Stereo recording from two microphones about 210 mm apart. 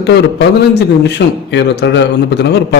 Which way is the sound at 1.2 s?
50° left (ahead or behind).